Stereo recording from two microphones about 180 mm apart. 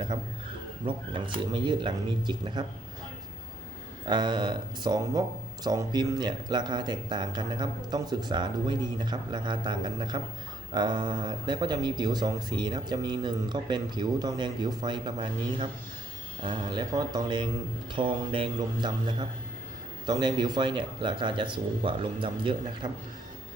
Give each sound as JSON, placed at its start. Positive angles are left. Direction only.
{"t": 0.9, "sound": "speech", "side_deg": -30}
{"t": 4.0, "sound": "speech", "side_deg": -25}